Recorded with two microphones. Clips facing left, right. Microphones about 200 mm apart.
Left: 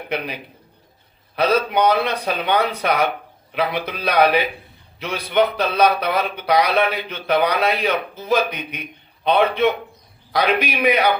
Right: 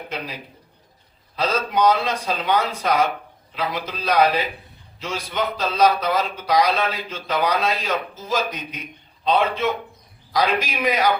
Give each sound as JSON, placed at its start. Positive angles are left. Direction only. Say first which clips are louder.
{"t": 0.1, "sound": "speech", "louder": "left 7 dB", "side_deg": 65}
{"t": 1.4, "sound": "speech", "louder": "left 3 dB", "side_deg": 60}